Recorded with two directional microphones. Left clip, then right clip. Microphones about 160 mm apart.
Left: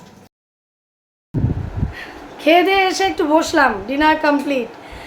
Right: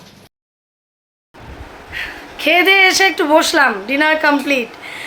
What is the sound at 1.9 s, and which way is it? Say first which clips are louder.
A woman's voice: right 7 dB; centre (ahead or behind).